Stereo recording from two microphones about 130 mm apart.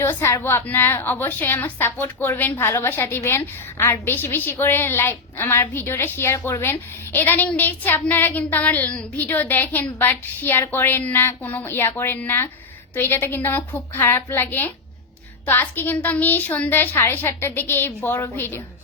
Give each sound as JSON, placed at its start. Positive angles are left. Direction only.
{"t": 0.0, "sound": "a woman's voice", "side_deg": 20}